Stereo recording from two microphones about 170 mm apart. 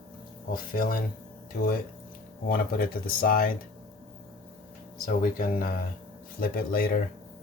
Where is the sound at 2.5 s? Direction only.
60° left (ahead or behind).